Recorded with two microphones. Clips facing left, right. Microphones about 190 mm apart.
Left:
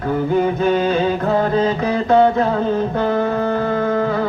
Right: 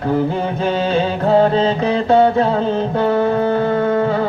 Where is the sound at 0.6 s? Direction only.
30° right (ahead or behind).